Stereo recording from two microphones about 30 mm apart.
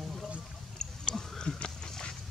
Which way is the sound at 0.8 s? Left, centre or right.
Left.